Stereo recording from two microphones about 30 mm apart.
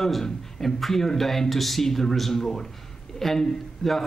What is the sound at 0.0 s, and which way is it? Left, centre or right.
Speech, centre.